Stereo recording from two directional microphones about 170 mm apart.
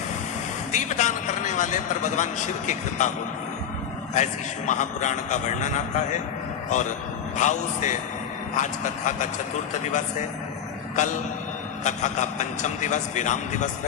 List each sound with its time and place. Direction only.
0.7 s a man's voice: 45° left (ahead or behind)
4.1 s a man's voice: 45° left (ahead or behind)